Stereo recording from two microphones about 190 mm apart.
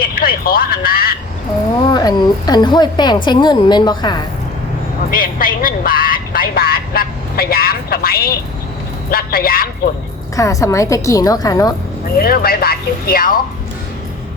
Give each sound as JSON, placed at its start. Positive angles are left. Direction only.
{"t": 0.0, "sound": "a sound", "side_deg": 50}
{"t": 1.9, "sound": "a woman's voice", "side_deg": 20}
{"t": 5.1, "sound": "speech", "side_deg": 50}
{"t": 10.3, "sound": "a woman's voice", "side_deg": 15}
{"t": 12.1, "sound": "speech", "side_deg": 50}